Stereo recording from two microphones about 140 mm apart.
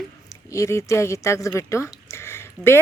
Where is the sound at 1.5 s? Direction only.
20° left (ahead or behind).